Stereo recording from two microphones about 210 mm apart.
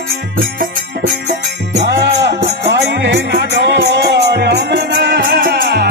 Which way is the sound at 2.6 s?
55° right (ahead or behind).